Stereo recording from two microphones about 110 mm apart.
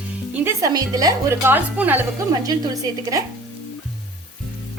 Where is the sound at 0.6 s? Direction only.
35° right (ahead or behind).